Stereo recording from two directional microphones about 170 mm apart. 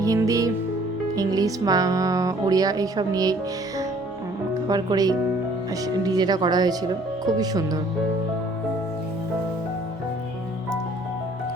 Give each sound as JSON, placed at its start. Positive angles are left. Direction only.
{"t": 0.0, "sound": "speech", "side_deg": -20}
{"t": 4.7, "sound": "speech", "side_deg": -20}